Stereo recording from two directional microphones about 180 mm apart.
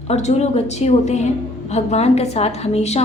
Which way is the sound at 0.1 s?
35° left (ahead or behind).